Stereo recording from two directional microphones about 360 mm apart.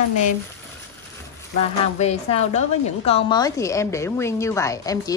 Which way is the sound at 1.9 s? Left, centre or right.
Centre.